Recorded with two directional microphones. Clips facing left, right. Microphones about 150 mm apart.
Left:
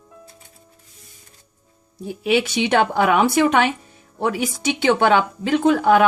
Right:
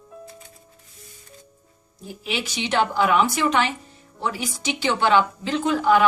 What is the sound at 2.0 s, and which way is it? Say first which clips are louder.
Speech: left 10 dB; 65° left (ahead or behind).